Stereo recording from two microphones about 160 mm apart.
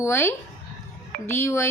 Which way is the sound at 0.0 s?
15° left (ahead or behind).